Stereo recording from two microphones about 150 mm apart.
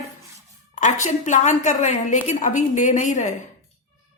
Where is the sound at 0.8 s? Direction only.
50° left (ahead or behind).